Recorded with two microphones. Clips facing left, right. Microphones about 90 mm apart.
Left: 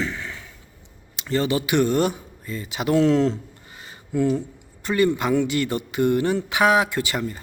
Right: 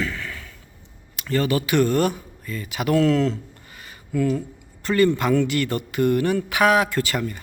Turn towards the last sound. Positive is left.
turn(degrees=20)  # may be behind; listen again after turning